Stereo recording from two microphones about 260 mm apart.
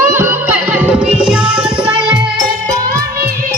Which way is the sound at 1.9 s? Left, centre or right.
Centre.